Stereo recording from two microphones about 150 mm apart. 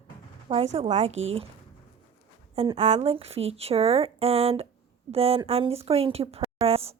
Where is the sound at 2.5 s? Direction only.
40° right (ahead or behind).